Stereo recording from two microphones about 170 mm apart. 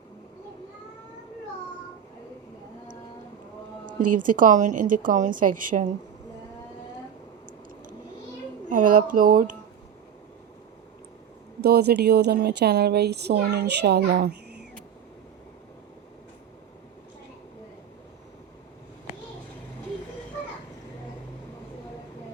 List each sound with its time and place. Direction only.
4.2 s a woman's voice: 50° right (ahead or behind)
8.7 s speech: 50° right (ahead or behind)
11.6 s a woman's voice: 70° right (ahead or behind)